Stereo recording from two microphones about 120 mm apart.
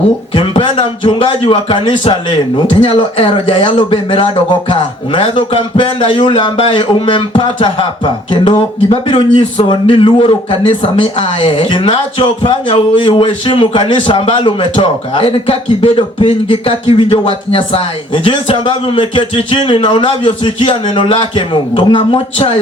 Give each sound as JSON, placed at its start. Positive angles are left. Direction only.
{"t": 0.3, "sound": "a man's voice", "side_deg": 45}